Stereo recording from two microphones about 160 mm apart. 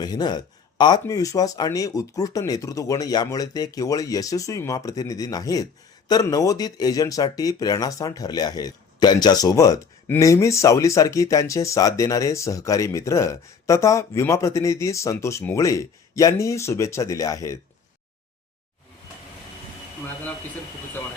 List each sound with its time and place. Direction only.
0.0 s speech: 25° left (ahead or behind)